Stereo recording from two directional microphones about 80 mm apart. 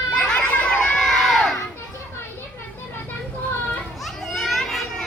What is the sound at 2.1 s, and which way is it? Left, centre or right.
Children playing, left.